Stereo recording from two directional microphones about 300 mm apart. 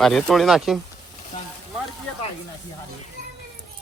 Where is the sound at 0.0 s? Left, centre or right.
Centre.